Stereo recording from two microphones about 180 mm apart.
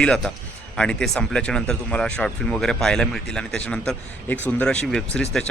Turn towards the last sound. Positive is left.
turn(degrees=5)  # may be behind; listen again after turning